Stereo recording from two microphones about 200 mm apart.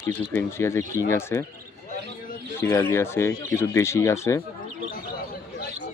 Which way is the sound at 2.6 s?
15° left (ahead or behind).